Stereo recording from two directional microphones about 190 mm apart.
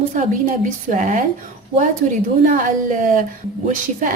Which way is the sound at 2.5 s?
45° right (ahead or behind).